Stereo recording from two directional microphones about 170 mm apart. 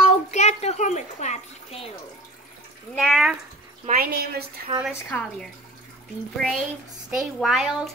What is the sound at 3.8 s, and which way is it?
Speech, 60° right (ahead or behind).